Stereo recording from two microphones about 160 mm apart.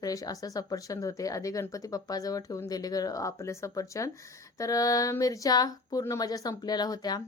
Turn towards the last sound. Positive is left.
turn(degrees=25)  # may be behind; listen again after turning